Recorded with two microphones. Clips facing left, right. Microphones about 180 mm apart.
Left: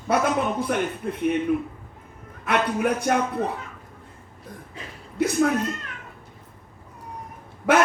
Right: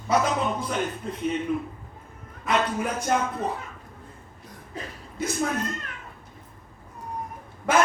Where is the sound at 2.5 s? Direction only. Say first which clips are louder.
Left 3 dB; 65° left (ahead or behind).